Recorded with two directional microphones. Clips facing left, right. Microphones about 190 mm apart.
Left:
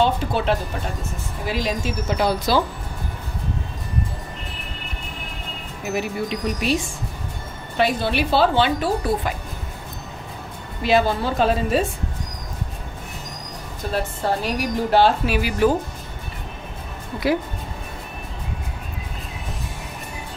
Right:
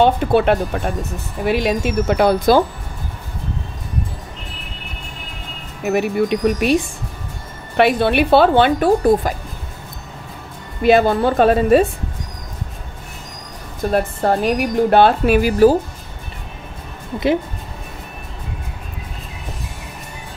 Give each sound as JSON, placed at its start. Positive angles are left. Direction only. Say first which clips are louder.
{"t": 0.0, "sound": "speech", "louder": "right 6 dB", "side_deg": -60}
{"t": 5.9, "sound": "speech", "louder": "right 8 dB", "side_deg": -55}
{"t": 10.8, "sound": "speech", "louder": "right 6 dB", "side_deg": -55}
{"t": 13.9, "sound": "a woman's voice", "louder": "right 6 dB", "side_deg": -55}